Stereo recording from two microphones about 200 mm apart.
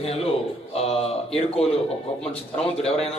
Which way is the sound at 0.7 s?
30° left (ahead or behind).